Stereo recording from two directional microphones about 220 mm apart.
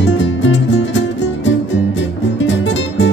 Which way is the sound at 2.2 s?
55° left (ahead or behind).